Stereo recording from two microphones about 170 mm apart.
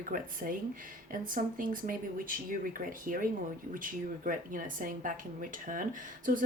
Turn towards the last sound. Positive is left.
turn(degrees=-50)  # may be behind; listen again after turning